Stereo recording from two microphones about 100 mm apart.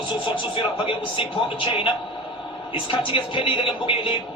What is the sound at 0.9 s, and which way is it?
Speech, 60° left (ahead or behind).